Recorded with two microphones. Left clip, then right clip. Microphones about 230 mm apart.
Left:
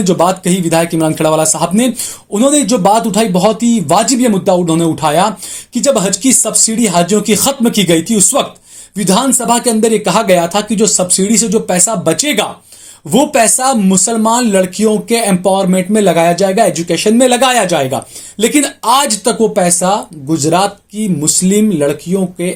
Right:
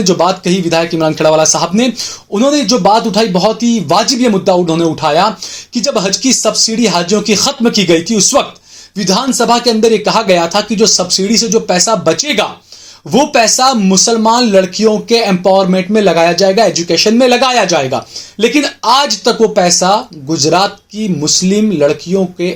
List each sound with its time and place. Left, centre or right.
0.0 s speech: left